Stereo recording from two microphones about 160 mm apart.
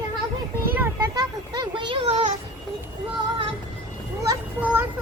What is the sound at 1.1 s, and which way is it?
A child's voice, 25° right (ahead or behind).